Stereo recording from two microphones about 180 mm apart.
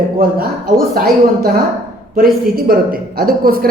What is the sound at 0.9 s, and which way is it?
Speech, 55° right (ahead or behind).